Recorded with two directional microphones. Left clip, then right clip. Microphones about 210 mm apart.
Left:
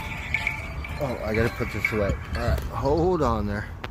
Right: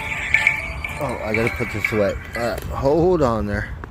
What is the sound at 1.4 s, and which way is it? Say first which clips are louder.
Speech: right 4 dB; 45° right (ahead or behind).